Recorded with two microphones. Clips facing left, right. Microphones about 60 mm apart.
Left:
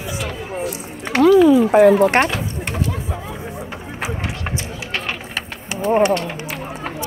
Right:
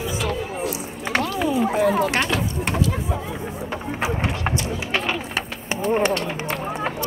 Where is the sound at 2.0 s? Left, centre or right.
Left.